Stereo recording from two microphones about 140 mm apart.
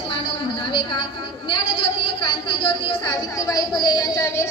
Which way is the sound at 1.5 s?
90° right.